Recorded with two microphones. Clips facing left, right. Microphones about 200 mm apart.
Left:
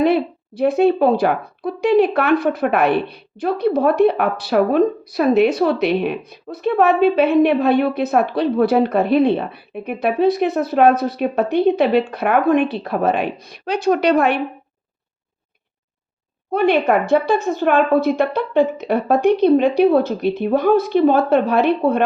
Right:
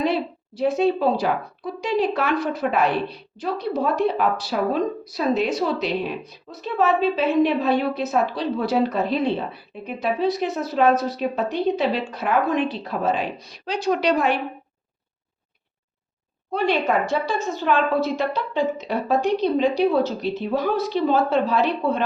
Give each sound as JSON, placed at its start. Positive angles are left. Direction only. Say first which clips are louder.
{"t": 0.0, "sound": "speech", "louder": "left 7 dB", "side_deg": 60}
{"t": 16.5, "sound": "speech", "louder": "left 6 dB", "side_deg": 55}